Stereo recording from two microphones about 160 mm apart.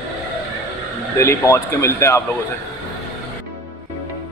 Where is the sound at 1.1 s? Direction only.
15° left (ahead or behind).